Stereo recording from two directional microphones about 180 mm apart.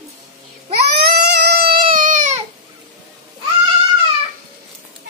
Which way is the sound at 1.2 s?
65° right (ahead or behind).